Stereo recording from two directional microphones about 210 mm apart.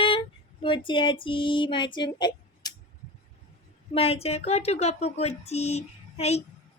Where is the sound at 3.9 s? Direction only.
30° left (ahead or behind).